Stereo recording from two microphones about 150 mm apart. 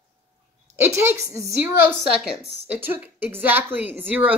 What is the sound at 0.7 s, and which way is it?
A woman's voice, 15° right (ahead or behind).